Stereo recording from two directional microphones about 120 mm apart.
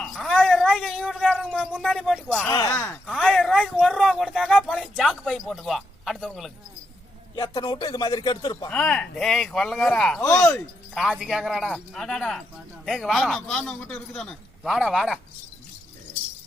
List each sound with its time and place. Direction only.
0.0 s a sound: 5° left (ahead or behind)
1.5 s speech: 5° right (ahead or behind)
2.5 s speech: 30° left (ahead or behind)
2.7 s speech: 20° left (ahead or behind)
3.2 s speech: 5° left (ahead or behind)
7.3 s speech: 35° left (ahead or behind)
8.7 s speech: 5° left (ahead or behind)
10.3 s speech: 25° left (ahead or behind)
10.9 s speech: 5° right (ahead or behind)